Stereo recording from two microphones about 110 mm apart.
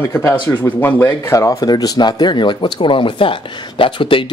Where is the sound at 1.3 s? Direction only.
30° left (ahead or behind).